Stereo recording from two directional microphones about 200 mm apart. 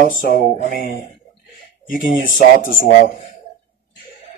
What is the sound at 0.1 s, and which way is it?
Speech, 45° left (ahead or behind).